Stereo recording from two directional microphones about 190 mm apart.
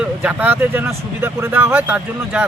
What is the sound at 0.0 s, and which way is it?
Speech, 10° right (ahead or behind).